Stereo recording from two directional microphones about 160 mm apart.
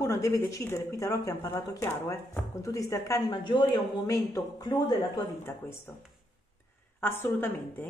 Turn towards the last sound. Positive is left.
turn(degrees=10)  # may be behind; listen again after turning